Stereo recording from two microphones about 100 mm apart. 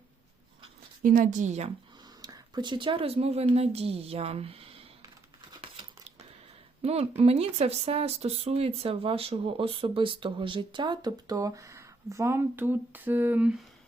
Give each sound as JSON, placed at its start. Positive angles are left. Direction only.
{"t": 2.2, "sound": "speech", "side_deg": -45}
{"t": 5.5, "sound": "a sound", "side_deg": -60}
{"t": 6.8, "sound": "speech", "side_deg": -90}